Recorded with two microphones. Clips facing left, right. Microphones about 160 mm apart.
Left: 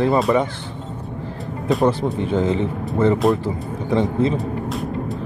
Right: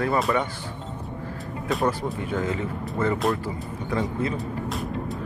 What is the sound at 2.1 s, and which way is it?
Speech, 25° left (ahead or behind).